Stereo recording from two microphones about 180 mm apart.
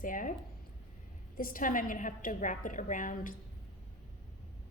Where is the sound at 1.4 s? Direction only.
50° left (ahead or behind).